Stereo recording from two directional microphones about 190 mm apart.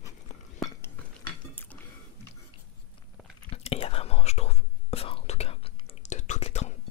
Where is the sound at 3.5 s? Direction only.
30° left (ahead or behind).